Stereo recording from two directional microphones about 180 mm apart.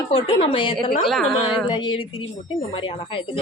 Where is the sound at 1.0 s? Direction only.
Centre (ahead or behind).